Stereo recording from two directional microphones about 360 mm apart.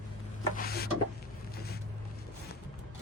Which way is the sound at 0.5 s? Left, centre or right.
Left.